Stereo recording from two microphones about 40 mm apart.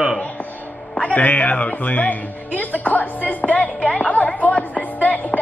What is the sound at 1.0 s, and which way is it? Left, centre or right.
Speech, left.